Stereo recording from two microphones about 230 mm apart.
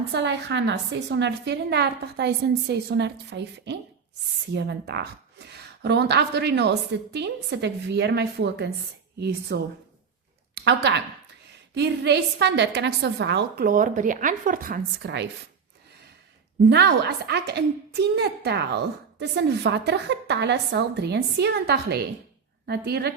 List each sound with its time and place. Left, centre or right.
0.1 s a woman's voice: right
10.5 s a sound: right
11.7 s a woman's voice: right
16.6 s a woman's voice: right